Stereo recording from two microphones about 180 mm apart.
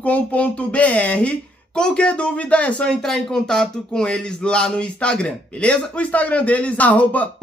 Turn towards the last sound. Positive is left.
turn(degrees=10)  # may be behind; listen again after turning